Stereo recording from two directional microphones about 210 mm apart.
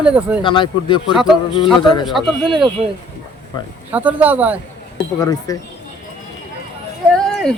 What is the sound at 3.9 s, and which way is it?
Speech, 5° right (ahead or behind).